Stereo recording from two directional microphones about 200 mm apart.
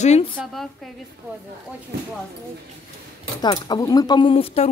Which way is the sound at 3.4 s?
20° left (ahead or behind).